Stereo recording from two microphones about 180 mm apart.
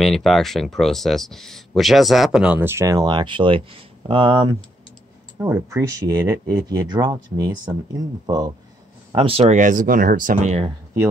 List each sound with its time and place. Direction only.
0.0 s speech: centre (ahead or behind); by 10.7 s 40° right (ahead or behind)